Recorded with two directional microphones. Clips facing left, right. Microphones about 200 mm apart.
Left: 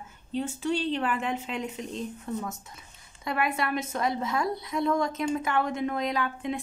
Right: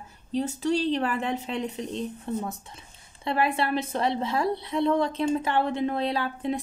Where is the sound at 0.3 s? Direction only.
40° right (ahead or behind).